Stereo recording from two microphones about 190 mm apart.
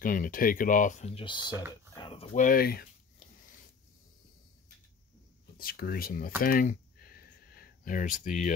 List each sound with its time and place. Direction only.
0.0 s speech: 45° left (ahead or behind)
5.6 s speech: 50° left (ahead or behind)
6.4 s a sound: 45° left (ahead or behind)